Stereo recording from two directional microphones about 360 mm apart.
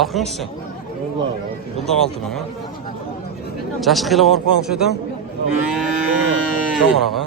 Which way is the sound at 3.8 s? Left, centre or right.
Centre.